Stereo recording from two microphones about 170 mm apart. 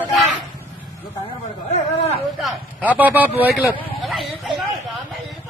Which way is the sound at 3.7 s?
30° left (ahead or behind).